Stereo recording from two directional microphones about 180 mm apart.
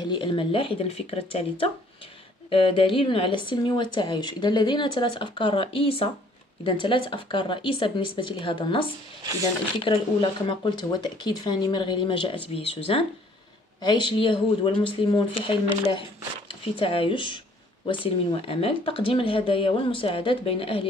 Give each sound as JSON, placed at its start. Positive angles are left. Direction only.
{"t": 0.0, "sound": "speech", "side_deg": 25}